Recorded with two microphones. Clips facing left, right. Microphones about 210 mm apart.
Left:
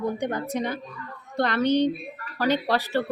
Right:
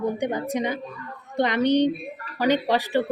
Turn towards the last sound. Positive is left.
turn(degrees=-15)  # may be behind; listen again after turning